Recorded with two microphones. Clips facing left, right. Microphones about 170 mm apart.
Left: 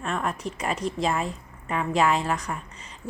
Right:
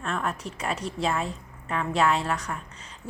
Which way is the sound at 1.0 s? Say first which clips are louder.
Right 1 dB; centre (ahead or behind).